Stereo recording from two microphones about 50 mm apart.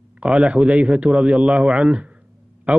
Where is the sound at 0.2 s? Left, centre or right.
Right.